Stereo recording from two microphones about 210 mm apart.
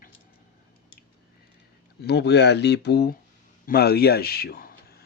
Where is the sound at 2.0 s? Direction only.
50° left (ahead or behind).